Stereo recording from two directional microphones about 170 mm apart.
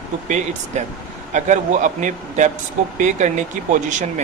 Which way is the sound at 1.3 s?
45° right (ahead or behind).